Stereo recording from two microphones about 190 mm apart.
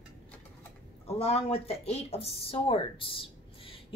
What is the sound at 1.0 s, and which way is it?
Speech, 30° left (ahead or behind).